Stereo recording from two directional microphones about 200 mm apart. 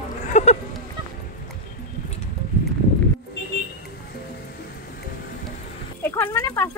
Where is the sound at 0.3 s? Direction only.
35° left (ahead or behind).